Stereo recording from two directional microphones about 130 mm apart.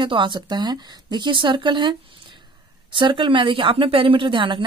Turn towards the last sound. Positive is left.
turn(degrees=-40)  # may be behind; listen again after turning